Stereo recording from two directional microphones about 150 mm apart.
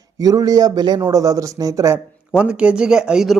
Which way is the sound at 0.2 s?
25° right (ahead or behind).